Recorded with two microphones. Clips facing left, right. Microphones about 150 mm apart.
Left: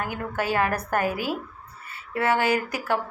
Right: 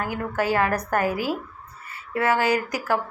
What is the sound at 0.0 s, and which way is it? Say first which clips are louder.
A woman's voice: right 3 dB; 25° left (ahead or behind).